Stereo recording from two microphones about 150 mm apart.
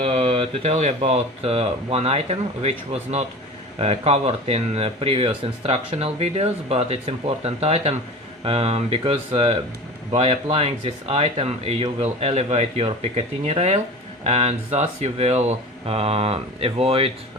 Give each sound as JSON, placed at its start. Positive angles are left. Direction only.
{"t": 0.0, "sound": "speech", "side_deg": -40}